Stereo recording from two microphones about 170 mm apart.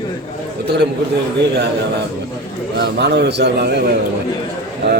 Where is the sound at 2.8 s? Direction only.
85° right.